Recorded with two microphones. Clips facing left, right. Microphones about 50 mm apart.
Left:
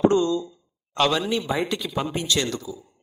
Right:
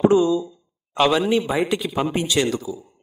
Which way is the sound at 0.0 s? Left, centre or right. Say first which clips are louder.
Right 3 dB; centre.